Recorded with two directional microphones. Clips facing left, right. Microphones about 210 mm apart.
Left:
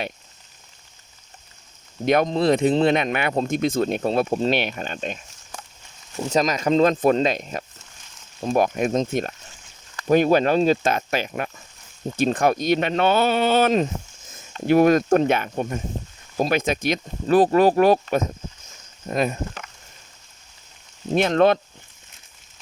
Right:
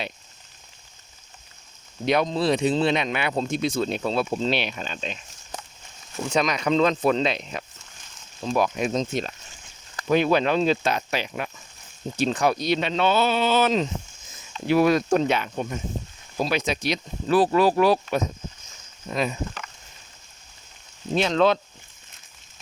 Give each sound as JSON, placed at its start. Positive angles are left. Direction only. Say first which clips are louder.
{"t": 2.0, "sound": "speech", "louder": "left 3 dB", "side_deg": 50}
{"t": 6.2, "sound": "speech", "louder": "left 2 dB", "side_deg": 40}
{"t": 21.1, "sound": "speech", "louder": "left 3 dB", "side_deg": 50}